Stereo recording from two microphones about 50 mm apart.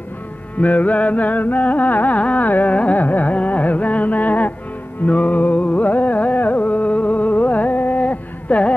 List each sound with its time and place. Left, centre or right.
0.6 s music: left
5.0 s carnatic music: left